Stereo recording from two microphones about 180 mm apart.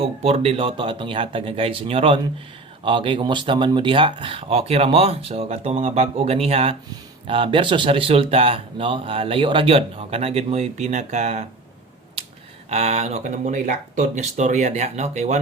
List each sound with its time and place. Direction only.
0.0 s speech: 35° right (ahead or behind)
12.2 s a sound: 35° right (ahead or behind)
12.7 s speech: 35° right (ahead or behind)